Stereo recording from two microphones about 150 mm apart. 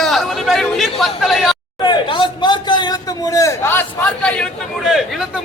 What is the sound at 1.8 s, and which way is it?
A man's voice, 30° left (ahead or behind).